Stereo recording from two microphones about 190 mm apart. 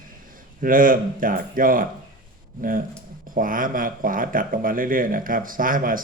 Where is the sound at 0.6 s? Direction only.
45° right (ahead or behind).